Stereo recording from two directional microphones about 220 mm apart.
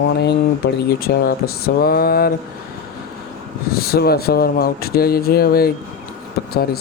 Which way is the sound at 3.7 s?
45° left (ahead or behind).